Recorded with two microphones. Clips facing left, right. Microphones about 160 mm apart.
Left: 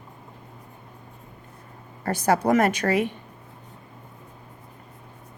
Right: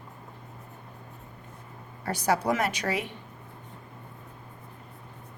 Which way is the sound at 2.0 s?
50° left (ahead or behind).